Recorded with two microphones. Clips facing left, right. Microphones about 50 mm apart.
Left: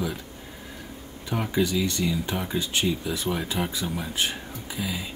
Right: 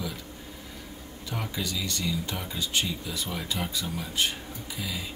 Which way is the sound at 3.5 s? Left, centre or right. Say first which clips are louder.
Left 3 dB; left.